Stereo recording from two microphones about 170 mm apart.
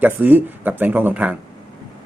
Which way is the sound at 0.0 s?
10° right (ahead or behind).